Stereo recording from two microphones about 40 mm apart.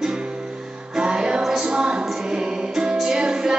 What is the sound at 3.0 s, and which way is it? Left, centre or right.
Music, centre.